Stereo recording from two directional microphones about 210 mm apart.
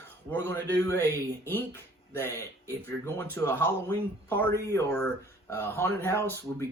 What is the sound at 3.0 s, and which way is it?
Speech, 10° left (ahead or behind).